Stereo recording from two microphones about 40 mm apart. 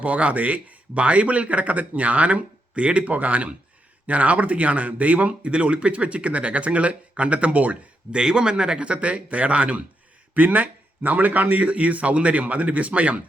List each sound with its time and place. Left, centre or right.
0.0 s speech: right
8.1 s speech: centre
10.3 s speech: right
11.6 s speech: right